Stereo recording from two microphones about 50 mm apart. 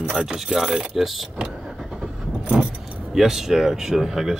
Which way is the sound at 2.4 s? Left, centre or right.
Centre.